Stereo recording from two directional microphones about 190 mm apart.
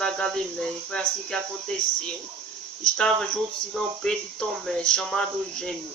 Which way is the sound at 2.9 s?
5° left (ahead or behind).